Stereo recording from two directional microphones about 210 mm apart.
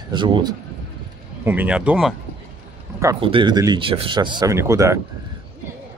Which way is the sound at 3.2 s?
25° right (ahead or behind).